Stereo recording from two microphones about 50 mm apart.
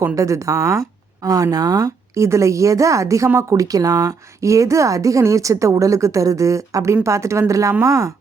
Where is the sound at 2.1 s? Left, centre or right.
Right.